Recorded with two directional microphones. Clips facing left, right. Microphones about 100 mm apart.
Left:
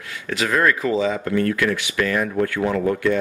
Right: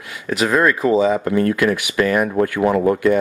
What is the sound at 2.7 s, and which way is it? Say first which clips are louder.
Speech: right 7 dB; 30° right (ahead or behind).